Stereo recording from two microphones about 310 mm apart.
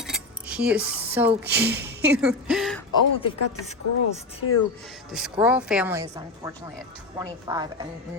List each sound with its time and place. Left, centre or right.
0.0 s cutlery: centre
1.5 s speech: centre
2.9 s speech: centre
5.1 s a woman's voice: centre